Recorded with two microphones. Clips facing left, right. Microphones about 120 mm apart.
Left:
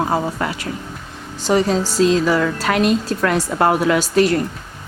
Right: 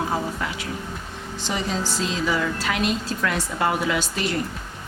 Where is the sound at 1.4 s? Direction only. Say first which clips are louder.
Left 10 dB; 40° left (ahead or behind).